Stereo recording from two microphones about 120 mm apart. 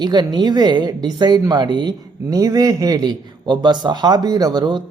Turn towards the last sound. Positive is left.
turn(degrees=-35)  # may be behind; listen again after turning